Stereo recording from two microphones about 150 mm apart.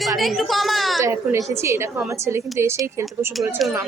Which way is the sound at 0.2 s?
Centre (ahead or behind).